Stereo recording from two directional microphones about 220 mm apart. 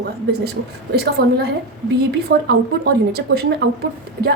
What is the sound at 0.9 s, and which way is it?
Speech, 45° right (ahead or behind).